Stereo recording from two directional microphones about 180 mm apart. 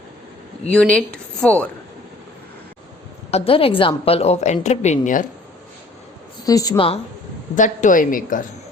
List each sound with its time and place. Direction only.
0.7 s a woman's voice: 5° left (ahead or behind)
3.3 s a woman's voice: 30° left (ahead or behind)
6.4 s a woman's voice: 20° left (ahead or behind)
7.5 s speech: 45° left (ahead or behind)